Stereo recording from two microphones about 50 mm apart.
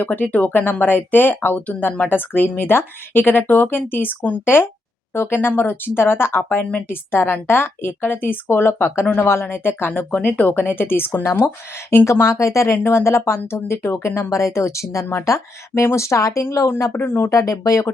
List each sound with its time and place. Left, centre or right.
0.0 s speech: left
4.4 s speech: left
11.2 s speech: left
12.2 s speech: left
15.3 s speech: left
16.9 s speech: left
17.3 s speech: left